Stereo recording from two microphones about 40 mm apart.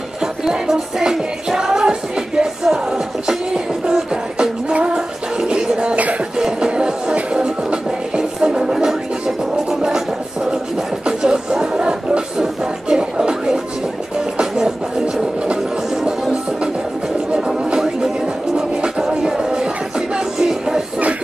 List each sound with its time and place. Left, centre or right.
0.2 s music: centre
5.9 s a sound: right
6.3 s music: centre
9.8 s a sound: centre
12.4 s music: centre
17.3 s music: right